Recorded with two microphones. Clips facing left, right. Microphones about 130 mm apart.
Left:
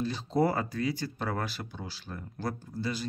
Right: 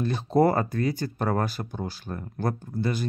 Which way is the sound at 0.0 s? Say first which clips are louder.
Right 6 dB; 55° right (ahead or behind).